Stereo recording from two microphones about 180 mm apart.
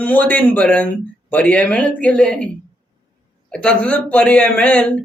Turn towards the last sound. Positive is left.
turn(degrees=5)  # may be behind; listen again after turning